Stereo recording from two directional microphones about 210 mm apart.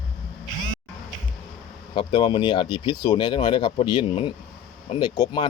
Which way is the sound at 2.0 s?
25° left (ahead or behind).